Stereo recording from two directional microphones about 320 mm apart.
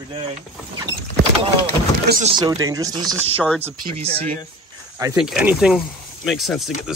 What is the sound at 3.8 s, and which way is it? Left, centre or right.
Speech, centre.